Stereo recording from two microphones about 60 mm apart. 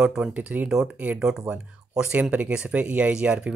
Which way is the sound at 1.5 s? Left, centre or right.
Right.